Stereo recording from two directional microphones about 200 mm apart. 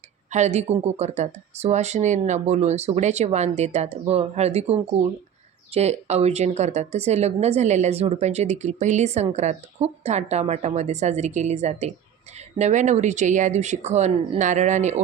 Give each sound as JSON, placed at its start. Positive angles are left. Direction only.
{"t": 0.3, "sound": "speech", "side_deg": -35}